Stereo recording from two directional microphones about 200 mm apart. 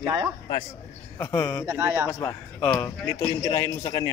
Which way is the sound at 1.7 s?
10° right (ahead or behind).